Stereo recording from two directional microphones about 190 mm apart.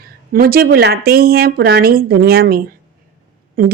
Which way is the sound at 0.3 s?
50° right (ahead or behind).